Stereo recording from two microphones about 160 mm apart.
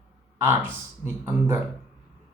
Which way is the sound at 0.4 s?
10° right (ahead or behind).